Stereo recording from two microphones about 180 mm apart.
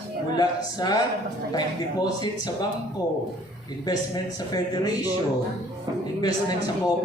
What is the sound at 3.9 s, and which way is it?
Speech, 20° left (ahead or behind).